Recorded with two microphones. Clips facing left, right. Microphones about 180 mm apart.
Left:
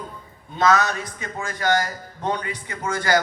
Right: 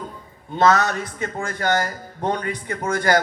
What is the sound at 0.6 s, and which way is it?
Speech, 55° right (ahead or behind).